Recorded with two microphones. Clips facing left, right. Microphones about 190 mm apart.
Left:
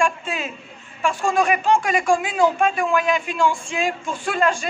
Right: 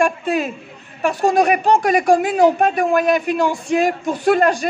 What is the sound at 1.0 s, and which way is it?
Speech, 40° right (ahead or behind).